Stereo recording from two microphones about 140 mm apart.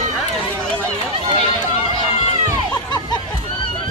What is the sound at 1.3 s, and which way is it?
Run, 35° right (ahead or behind).